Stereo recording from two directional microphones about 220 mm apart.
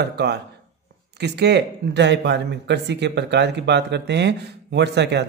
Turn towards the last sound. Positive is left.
turn(degrees=-50)  # may be behind; listen again after turning